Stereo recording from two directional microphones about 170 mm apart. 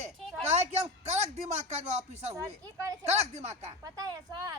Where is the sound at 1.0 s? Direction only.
40° right (ahead or behind).